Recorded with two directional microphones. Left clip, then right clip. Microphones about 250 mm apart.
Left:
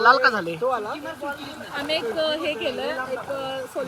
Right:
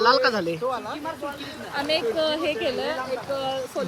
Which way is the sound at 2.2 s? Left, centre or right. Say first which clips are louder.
Even; centre.